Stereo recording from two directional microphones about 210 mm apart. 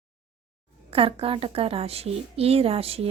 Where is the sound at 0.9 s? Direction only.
25° right (ahead or behind).